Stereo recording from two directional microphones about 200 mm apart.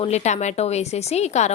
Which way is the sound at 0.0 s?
35° left (ahead or behind).